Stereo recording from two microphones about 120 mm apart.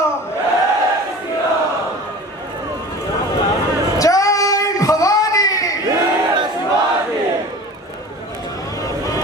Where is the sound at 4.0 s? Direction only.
30° left (ahead or behind).